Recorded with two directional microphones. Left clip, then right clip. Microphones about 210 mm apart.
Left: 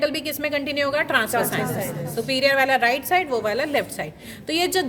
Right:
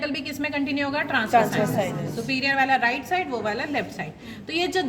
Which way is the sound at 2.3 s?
55° left (ahead or behind).